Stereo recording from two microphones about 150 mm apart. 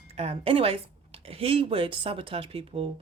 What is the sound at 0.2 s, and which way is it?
Speech, 40° right (ahead or behind).